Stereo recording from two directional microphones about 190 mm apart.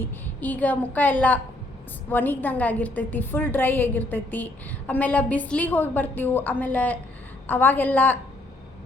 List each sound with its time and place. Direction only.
0.0 s a woman's voice: 10° left (ahead or behind)